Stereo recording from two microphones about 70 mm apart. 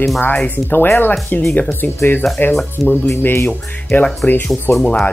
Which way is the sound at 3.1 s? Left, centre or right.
Left.